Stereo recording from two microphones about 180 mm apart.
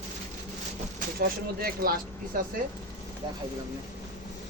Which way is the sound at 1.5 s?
55° right (ahead or behind).